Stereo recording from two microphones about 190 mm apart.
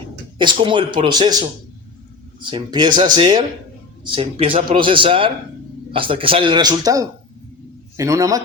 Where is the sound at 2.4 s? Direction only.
25° right (ahead or behind).